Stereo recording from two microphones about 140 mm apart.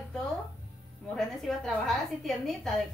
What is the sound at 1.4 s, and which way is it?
A woman's voice, centre (ahead or behind).